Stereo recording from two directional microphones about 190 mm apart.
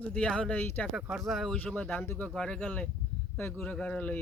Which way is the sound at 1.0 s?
Centre (ahead or behind).